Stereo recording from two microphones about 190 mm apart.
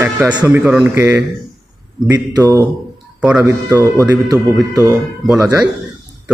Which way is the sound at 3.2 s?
5° right (ahead or behind).